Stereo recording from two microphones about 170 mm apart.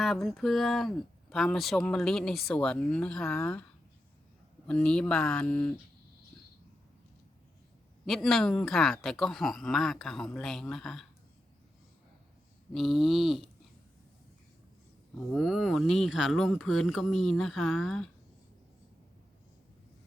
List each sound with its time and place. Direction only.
0.0 s speech: centre (ahead or behind)
8.0 s speech: centre (ahead or behind)
12.7 s speech: centre (ahead or behind)
15.3 s speech: centre (ahead or behind)